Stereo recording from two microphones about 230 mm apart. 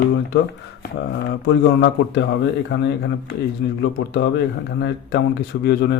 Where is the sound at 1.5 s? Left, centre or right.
Left.